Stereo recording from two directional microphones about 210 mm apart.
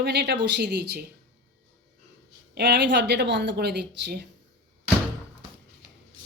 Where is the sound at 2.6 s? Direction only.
50° right (ahead or behind).